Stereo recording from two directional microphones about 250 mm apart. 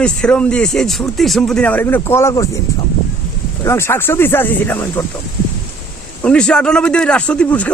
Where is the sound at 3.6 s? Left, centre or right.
Centre.